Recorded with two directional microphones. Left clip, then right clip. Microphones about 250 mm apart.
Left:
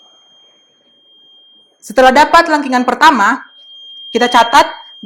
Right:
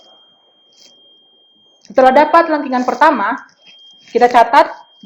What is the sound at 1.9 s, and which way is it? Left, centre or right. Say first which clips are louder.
A woman's voice: left 2 dB; left.